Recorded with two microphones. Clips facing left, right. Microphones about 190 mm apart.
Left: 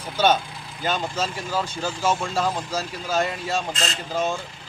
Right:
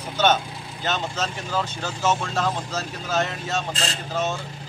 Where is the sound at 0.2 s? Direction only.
10° left (ahead or behind).